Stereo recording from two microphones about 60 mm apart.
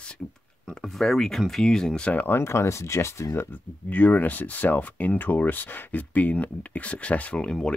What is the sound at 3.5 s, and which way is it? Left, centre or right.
Speech, left.